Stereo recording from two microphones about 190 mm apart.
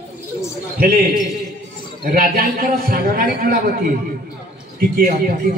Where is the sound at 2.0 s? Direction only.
50° right (ahead or behind).